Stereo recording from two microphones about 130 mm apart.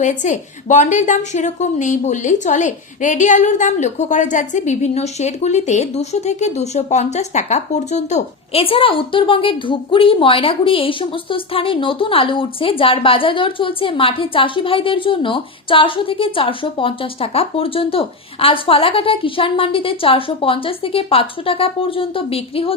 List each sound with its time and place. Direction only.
0.0 s a woman's voice: 70° left (ahead or behind); by 22.7 s 45° left (ahead or behind)